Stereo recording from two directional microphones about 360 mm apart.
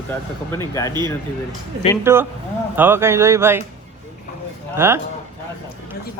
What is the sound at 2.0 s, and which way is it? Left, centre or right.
Speech, centre.